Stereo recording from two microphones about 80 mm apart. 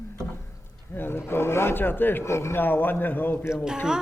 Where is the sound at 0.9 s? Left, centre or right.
Left.